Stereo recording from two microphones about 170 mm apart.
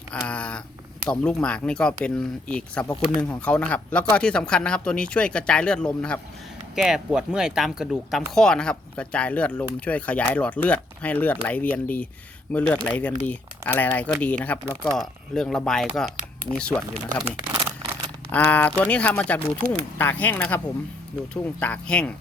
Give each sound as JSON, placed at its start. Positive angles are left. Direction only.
{"t": 0.1, "sound": "a sound", "side_deg": 5}
{"t": 1.1, "sound": "speech", "side_deg": 5}
{"t": 14.6, "sound": "speech", "side_deg": -15}
{"t": 14.9, "sound": "speech", "side_deg": 0}
{"t": 17.5, "sound": "a sound", "side_deg": -20}
{"t": 18.3, "sound": "speech", "side_deg": 10}
{"t": 21.6, "sound": "speech", "side_deg": 5}